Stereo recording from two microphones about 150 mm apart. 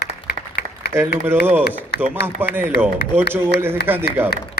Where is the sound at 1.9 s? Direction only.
90° left.